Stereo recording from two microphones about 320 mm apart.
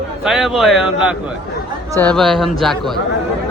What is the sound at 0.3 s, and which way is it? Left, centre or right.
Speech, centre.